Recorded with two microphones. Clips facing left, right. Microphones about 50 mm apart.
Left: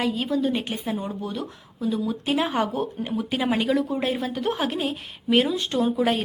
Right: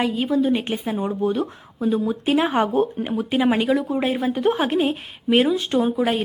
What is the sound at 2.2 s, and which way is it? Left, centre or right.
Speech, centre.